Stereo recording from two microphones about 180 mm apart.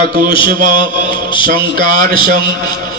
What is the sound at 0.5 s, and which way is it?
Mantra, 55° right (ahead or behind).